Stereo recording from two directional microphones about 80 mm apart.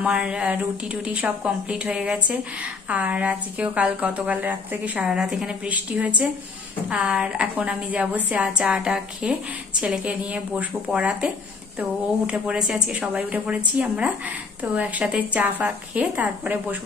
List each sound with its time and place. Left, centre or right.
0.0 s speech: centre
5.0 s speech: centre
5.7 s a woman's voice: centre